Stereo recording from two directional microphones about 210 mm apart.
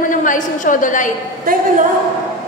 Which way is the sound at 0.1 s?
40° left (ahead or behind).